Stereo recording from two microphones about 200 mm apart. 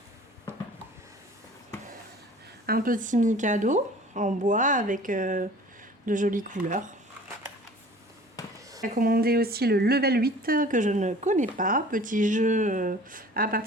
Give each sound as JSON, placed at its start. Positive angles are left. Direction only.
{"t": 2.6, "sound": "speech", "side_deg": -45}
{"t": 8.4, "sound": "a sound", "side_deg": 15}
{"t": 9.0, "sound": "speech", "side_deg": -50}